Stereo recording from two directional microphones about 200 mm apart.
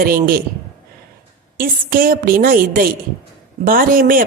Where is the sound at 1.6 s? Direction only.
45° right (ahead or behind).